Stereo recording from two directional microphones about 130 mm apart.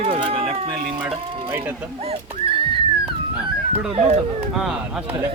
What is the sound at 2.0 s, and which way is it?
Speech, 50° right (ahead or behind).